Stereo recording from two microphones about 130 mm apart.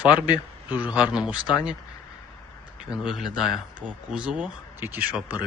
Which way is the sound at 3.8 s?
10° right (ahead or behind).